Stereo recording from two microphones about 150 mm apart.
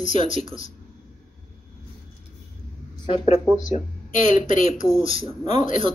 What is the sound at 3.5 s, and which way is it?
Speech, 55° left (ahead or behind).